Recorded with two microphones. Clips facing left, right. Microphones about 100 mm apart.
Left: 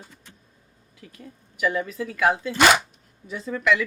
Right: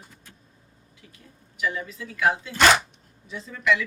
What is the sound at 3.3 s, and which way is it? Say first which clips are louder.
Speech: left 7 dB; 55° left (ahead or behind).